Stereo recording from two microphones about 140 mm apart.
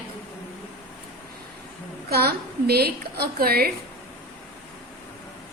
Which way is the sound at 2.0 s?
90° right.